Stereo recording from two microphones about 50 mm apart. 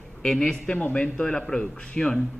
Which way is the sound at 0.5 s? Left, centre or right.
Centre.